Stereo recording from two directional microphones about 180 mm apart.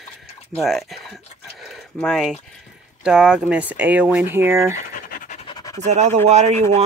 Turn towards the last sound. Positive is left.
turn(degrees=-40)  # may be behind; listen again after turning